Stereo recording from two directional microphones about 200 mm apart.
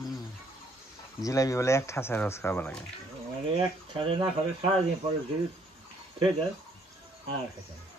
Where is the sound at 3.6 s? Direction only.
25° right (ahead or behind).